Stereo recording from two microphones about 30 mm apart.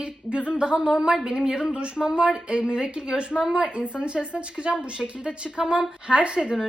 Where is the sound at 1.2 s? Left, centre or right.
Right.